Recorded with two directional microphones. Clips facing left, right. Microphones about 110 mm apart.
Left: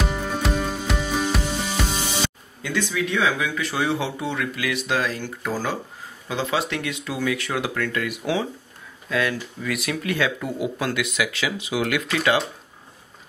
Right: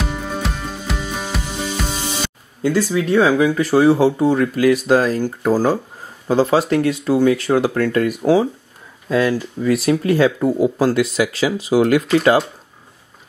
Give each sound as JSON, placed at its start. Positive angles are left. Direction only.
{"t": 0.0, "sound": "music", "side_deg": 0}
{"t": 2.6, "sound": "speech", "side_deg": -35}